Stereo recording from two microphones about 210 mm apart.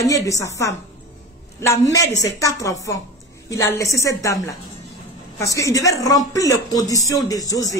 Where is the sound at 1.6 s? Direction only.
15° left (ahead or behind).